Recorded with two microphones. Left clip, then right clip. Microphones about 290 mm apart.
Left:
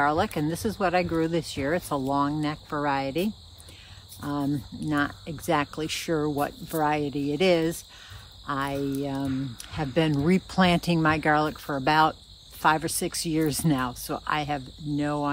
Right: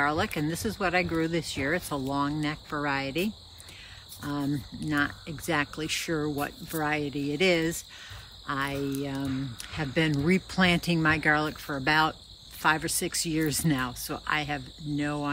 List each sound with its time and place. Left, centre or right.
0.0 s speech: centre